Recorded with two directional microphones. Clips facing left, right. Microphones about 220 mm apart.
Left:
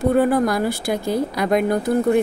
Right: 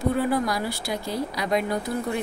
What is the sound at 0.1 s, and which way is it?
Speech, 50° left (ahead or behind).